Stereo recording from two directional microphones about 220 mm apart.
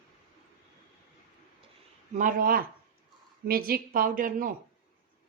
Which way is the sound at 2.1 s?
40° right (ahead or behind).